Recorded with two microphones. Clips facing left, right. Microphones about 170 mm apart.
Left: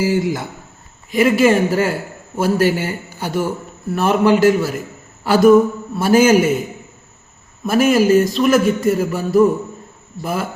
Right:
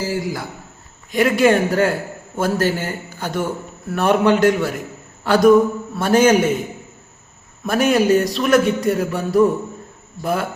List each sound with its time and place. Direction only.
0.0 s speech: 20° left (ahead or behind)
1.1 s a man's voice: centre (ahead or behind)
7.6 s a man's voice: centre (ahead or behind)